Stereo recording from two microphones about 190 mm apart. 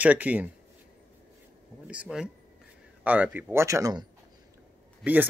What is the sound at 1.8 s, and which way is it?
Speech, 5° right (ahead or behind).